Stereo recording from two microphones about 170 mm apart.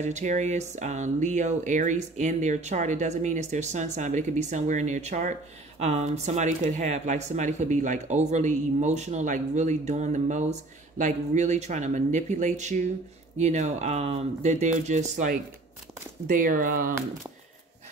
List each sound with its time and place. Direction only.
0.0 s speech: 45° right (ahead or behind)